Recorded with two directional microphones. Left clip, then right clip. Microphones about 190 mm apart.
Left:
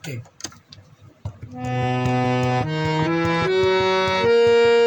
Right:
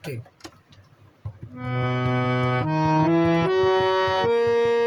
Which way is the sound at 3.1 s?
25° left (ahead or behind).